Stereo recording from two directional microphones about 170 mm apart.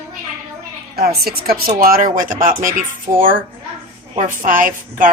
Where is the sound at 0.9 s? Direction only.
65° right (ahead or behind).